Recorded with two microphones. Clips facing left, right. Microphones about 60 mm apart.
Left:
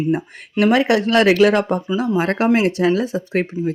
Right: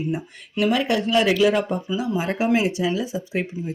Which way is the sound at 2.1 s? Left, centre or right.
Left.